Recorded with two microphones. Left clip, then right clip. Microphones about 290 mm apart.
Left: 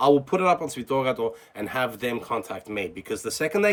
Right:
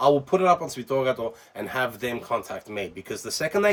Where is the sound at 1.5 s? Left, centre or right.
Centre.